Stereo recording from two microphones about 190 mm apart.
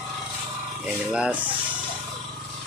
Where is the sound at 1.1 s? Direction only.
5° right (ahead or behind).